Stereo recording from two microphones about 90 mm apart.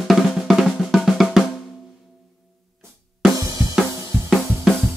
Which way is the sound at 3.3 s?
40° right (ahead or behind).